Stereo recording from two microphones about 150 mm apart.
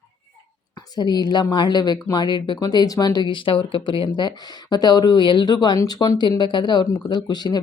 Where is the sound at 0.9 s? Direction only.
30° left (ahead or behind).